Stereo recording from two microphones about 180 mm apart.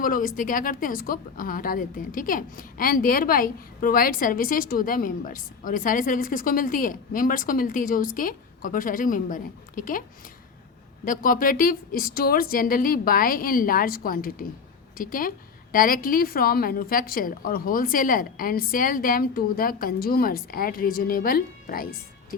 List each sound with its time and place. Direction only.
0.0 s a woman's voice: 50° left (ahead or behind)
11.0 s a woman's voice: 50° left (ahead or behind)